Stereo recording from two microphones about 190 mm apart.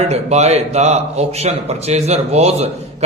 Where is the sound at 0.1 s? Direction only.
35° right (ahead or behind).